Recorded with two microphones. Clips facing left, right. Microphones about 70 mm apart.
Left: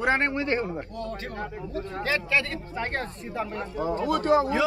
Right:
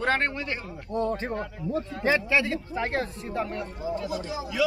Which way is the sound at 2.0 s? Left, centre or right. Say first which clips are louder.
Right 2 dB; centre.